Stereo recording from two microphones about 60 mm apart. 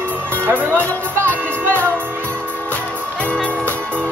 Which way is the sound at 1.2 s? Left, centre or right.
Right.